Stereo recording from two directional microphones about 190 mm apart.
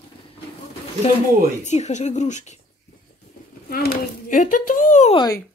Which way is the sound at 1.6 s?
35° left (ahead or behind).